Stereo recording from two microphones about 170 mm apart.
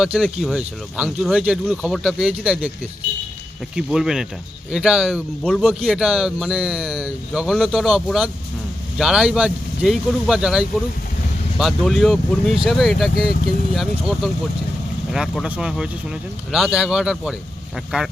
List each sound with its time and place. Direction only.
0.0 s speech: 5° right (ahead or behind)
3.8 s speech: 5° right (ahead or behind)